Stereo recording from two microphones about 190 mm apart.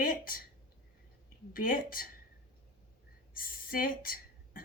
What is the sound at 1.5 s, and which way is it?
Speech, 50° left (ahead or behind).